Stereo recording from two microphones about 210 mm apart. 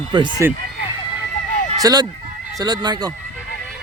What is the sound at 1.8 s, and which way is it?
Speech, 20° right (ahead or behind).